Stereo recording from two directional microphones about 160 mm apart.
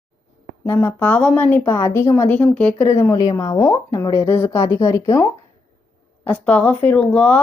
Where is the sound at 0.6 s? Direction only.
15° left (ahead or behind).